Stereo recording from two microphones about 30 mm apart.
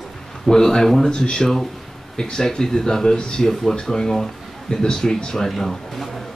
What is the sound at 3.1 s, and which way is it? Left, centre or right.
Speech, left.